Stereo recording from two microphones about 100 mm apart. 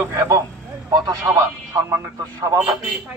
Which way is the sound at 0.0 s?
30° right (ahead or behind).